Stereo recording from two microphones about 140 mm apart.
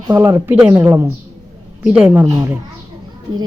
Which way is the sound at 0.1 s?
25° right (ahead or behind).